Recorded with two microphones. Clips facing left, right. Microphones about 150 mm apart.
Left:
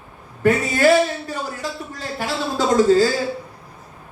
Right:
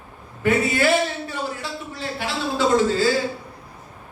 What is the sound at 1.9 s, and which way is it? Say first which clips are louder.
Speech: even; 40° left (ahead or behind).